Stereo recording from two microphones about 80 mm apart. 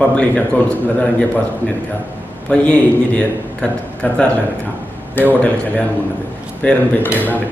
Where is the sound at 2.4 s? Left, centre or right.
Centre.